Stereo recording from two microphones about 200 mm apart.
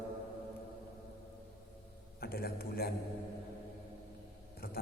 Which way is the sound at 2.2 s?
50° left (ahead or behind).